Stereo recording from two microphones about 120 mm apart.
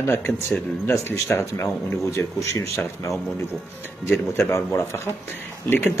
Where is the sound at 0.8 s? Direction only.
20° left (ahead or behind).